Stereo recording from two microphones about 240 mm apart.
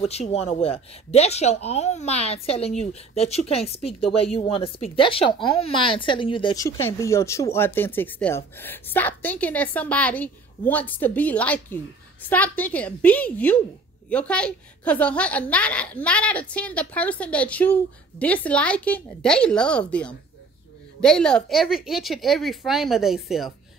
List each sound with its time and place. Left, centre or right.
0.0 s a woman's voice: left; by 23.5 s centre